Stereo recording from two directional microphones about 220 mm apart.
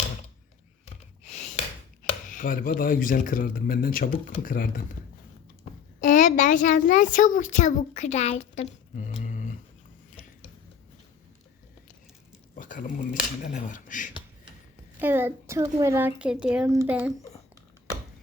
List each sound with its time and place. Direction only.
1.2 s gasp: 30° left (ahead or behind)
2.0 s speech: 35° left (ahead or behind)
5.7 s a sound: 30° left (ahead or behind)
6.0 s a child's voice: 35° left (ahead or behind)
12.5 s a sound: 35° left (ahead or behind)
13.4 s speech: 35° left (ahead or behind)
14.9 s a woman's voice: 10° right (ahead or behind)